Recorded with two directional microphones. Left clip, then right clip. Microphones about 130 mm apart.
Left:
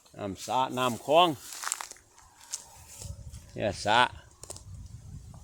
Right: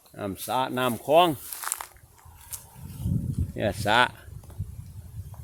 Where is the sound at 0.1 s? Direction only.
Centre (ahead or behind).